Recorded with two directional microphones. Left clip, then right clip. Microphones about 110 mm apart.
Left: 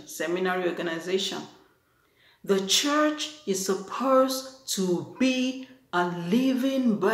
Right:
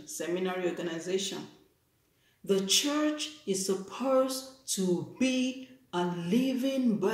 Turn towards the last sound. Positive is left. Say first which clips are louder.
# left 4 dB
turn(degrees=-20)  # may be behind; listen again after turning